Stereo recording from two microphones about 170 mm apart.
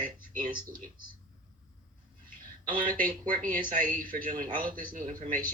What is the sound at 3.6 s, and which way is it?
Speech, 55° right (ahead or behind).